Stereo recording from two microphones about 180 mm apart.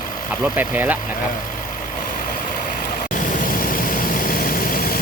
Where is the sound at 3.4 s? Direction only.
50° left (ahead or behind).